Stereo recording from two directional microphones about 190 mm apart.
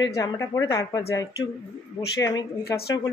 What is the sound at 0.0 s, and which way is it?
Speech, 15° left (ahead or behind).